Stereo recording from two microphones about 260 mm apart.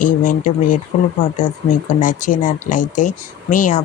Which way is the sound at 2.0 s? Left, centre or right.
Left.